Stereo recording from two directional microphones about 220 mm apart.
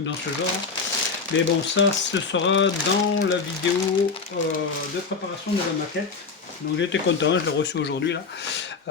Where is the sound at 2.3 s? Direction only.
55° left (ahead or behind).